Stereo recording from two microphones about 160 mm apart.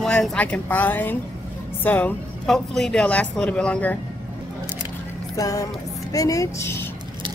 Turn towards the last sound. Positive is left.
turn(degrees=20)  # may be behind; listen again after turning